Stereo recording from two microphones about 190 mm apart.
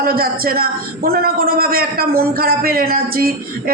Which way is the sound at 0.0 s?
50° right (ahead or behind).